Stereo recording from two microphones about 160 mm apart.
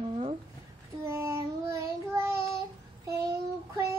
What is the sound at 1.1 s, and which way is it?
Child singing, 15° right (ahead or behind).